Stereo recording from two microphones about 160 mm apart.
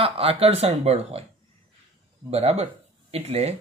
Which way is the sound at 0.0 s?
35° right (ahead or behind).